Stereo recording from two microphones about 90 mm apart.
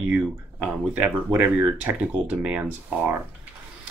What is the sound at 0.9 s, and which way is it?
Speech, 20° right (ahead or behind).